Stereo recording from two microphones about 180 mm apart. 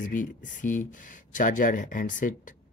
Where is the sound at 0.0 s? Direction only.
45° left (ahead or behind).